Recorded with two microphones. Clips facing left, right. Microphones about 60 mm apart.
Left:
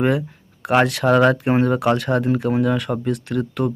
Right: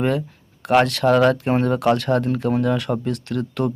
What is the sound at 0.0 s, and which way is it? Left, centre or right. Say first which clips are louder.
Speech: left 2 dB; centre.